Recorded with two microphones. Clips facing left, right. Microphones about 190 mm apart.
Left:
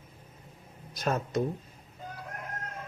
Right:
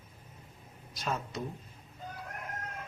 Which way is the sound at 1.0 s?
50° left (ahead or behind).